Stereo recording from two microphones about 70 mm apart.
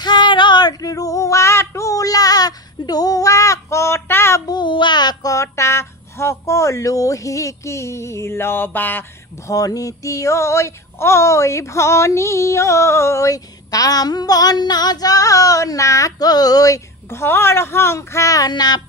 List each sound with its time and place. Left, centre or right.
0.0 s female singing: left
4.5 s child singing: left
5.3 s speech: left
9.5 s a sound: left
17.1 s speech: left
18.5 s music: left